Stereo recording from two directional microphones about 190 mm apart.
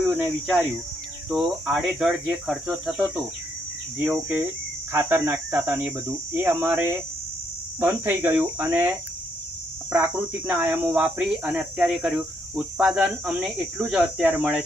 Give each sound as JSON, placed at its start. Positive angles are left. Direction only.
{"t": 0.0, "sound": "speech", "side_deg": -5}
{"t": 9.9, "sound": "speech", "side_deg": -10}